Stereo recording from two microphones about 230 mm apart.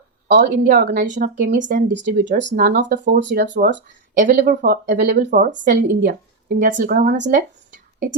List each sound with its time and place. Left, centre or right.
0.3 s speech: right
1.9 s speech: right
2.2 s speech: right